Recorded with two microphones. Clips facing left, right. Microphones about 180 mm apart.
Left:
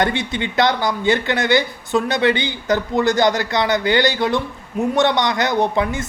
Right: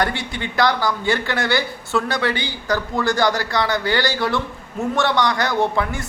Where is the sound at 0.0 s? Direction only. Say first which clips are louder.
Left 3 dB; 20° left (ahead or behind).